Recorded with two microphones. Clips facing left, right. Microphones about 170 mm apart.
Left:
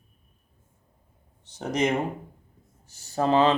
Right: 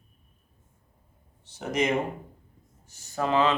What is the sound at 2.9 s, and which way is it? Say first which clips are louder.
Speech: left 4 dB; 30° left (ahead or behind).